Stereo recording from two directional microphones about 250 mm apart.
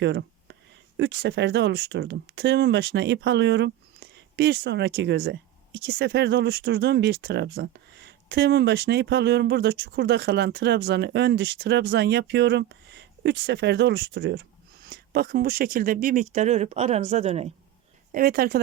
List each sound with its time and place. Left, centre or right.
0.0 s a sound: right
0.9 s speech: right
18.1 s speech: right